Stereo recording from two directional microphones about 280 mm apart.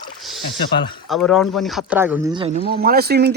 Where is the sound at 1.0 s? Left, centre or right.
Centre.